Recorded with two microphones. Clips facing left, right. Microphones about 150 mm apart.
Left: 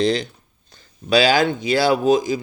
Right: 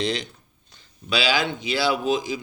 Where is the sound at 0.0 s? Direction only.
35° left (ahead or behind).